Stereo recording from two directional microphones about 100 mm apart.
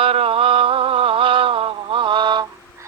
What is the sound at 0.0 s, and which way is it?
Mantra, 70° right (ahead or behind).